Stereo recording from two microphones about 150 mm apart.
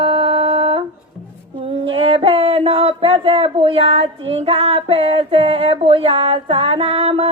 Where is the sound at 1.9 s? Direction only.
40° right (ahead or behind).